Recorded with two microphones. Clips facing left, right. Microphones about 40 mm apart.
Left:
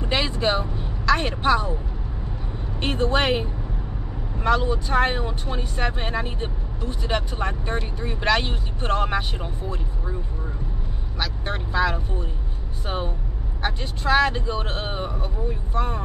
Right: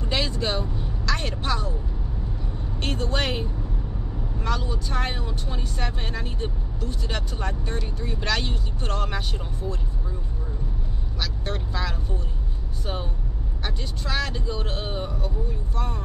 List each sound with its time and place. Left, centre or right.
0.0 s vehicle: left
2.8 s speech: centre
11.1 s speech: left